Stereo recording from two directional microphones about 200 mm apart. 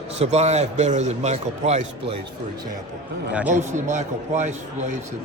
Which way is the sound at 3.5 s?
35° right (ahead or behind).